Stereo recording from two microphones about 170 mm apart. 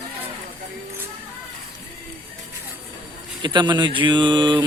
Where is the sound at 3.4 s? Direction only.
25° right (ahead or behind).